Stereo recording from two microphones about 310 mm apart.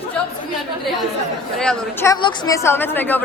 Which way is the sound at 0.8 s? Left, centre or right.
Centre.